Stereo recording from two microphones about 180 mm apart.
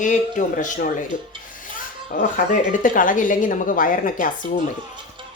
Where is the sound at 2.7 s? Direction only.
45° left (ahead or behind).